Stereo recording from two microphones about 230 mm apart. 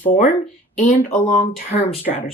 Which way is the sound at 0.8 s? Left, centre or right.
Left.